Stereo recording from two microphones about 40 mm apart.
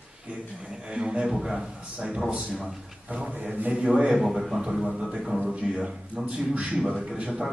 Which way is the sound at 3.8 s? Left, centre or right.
Centre.